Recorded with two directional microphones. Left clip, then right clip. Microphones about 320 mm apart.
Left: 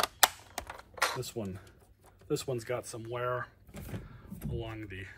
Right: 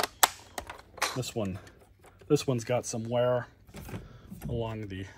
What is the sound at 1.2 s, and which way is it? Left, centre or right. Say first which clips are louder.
Speech: right 6 dB; right.